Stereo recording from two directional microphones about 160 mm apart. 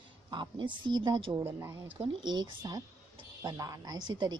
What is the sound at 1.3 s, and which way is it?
Speech, 15° right (ahead or behind).